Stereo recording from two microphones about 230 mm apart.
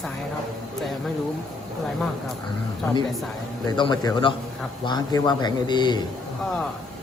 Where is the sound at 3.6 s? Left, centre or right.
Centre.